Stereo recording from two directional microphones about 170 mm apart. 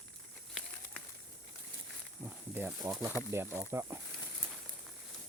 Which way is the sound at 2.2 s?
10° right (ahead or behind).